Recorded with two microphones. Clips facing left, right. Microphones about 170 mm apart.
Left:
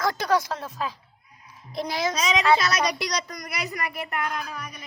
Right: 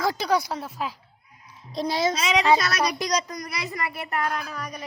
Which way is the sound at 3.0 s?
40° right (ahead or behind).